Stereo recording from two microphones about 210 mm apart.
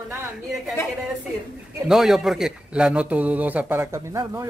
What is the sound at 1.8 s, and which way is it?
A man's voice, centre (ahead or behind).